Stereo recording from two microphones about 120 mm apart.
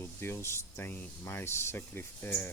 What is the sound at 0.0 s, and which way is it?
Speech, 20° left (ahead or behind).